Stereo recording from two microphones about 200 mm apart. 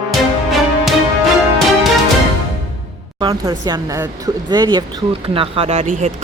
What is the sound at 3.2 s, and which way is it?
Speech, 20° right (ahead or behind).